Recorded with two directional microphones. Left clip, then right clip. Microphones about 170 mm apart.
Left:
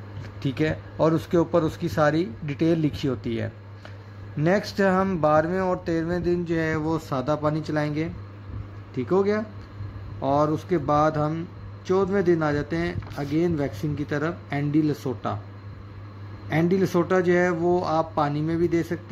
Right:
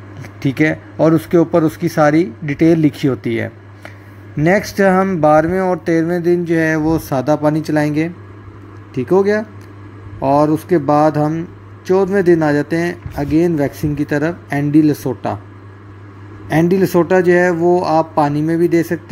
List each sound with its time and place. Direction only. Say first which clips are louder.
0.4 s speech: right 10 dB; 15° right (ahead or behind)
16.4 s speech: right 9 dB; 20° right (ahead or behind)